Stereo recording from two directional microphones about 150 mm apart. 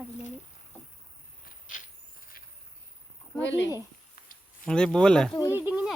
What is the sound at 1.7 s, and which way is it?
Vehicle, 60° left (ahead or behind).